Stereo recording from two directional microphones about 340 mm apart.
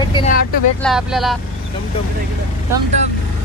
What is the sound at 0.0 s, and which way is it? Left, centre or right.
Speech, centre.